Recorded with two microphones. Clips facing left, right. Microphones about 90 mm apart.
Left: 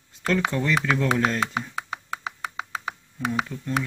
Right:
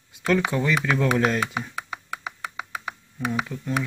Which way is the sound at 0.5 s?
15° right (ahead or behind).